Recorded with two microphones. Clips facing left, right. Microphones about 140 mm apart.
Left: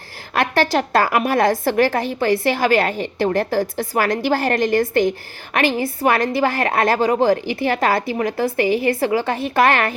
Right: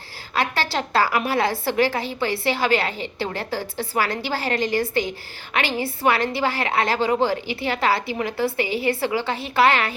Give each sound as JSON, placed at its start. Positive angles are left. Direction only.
{"t": 0.3, "sound": "a woman's voice", "side_deg": 50}